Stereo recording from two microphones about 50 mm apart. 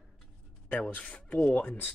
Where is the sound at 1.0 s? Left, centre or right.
Left.